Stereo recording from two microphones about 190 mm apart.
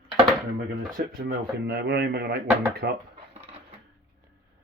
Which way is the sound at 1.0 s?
50° right (ahead or behind).